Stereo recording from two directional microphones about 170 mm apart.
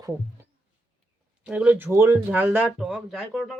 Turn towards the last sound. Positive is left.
turn(degrees=0)  # may be behind; listen again after turning